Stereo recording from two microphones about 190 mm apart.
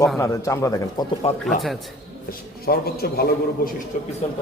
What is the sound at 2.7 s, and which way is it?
A man's voice, 55° left (ahead or behind).